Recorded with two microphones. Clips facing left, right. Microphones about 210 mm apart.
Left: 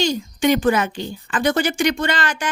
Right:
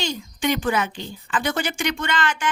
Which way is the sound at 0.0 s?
40° left (ahead or behind).